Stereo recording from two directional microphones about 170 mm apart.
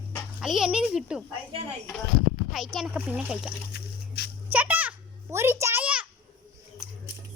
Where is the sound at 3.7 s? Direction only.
70° left (ahead or behind).